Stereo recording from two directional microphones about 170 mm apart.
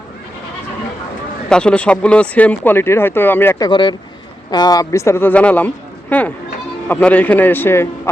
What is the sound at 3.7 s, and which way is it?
A man's voice, 30° left (ahead or behind).